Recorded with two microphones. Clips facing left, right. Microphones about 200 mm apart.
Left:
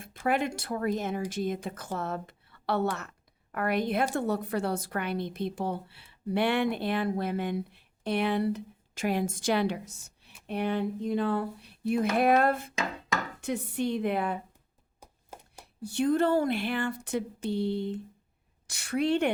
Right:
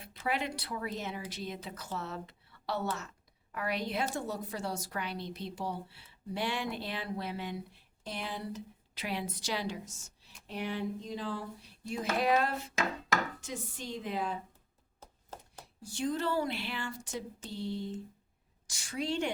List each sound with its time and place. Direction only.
0.0 s a woman's voice: 50° left (ahead or behind)
9.0 s a woman's voice: 45° left (ahead or behind)
15.0 s a sound: 10° left (ahead or behind)
15.6 s a woman's voice: 60° left (ahead or behind)